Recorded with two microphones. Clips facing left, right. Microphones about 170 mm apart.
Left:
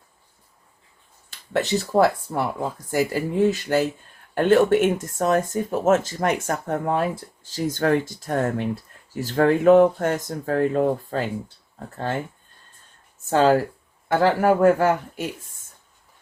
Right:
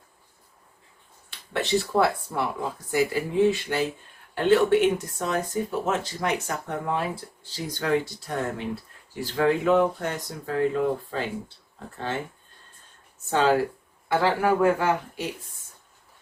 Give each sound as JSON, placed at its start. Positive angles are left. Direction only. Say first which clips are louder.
{"t": 1.3, "sound": "speech", "louder": "left 2 dB", "side_deg": 40}
{"t": 13.3, "sound": "speech", "louder": "left 4 dB", "side_deg": 45}